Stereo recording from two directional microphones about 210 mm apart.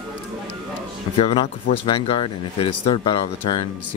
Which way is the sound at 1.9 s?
25° left (ahead or behind).